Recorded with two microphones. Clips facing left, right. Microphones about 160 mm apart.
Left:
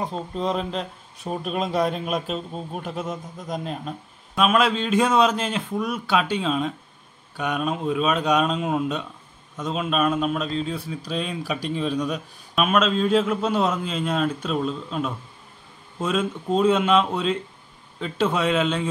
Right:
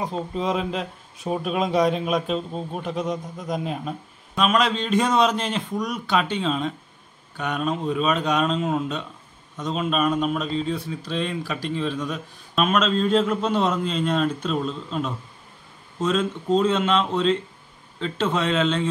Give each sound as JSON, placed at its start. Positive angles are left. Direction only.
{"t": 0.0, "sound": "speech", "side_deg": 0}
{"t": 12.5, "sound": "speech", "side_deg": 5}